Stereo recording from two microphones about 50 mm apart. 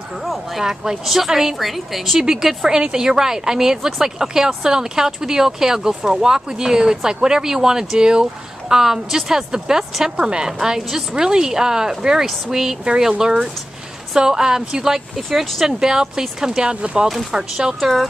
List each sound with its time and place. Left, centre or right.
0.6 s speech: centre
17.7 s speech: centre